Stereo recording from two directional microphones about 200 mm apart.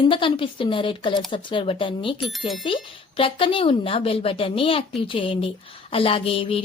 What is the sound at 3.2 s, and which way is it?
A woman's voice, 25° left (ahead or behind).